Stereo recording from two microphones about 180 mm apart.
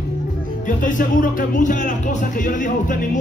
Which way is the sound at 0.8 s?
45° left (ahead or behind).